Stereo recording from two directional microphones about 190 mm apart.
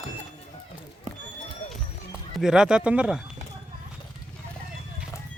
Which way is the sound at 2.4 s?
5° right (ahead or behind).